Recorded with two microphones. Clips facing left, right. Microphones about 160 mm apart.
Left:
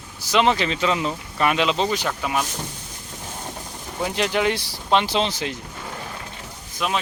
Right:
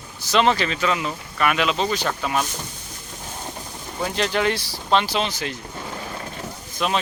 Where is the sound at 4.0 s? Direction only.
10° left (ahead or behind).